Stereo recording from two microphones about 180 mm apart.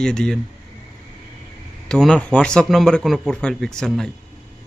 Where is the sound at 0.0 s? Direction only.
5° left (ahead or behind).